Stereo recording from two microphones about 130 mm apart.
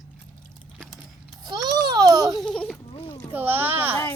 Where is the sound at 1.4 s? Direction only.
30° right (ahead or behind).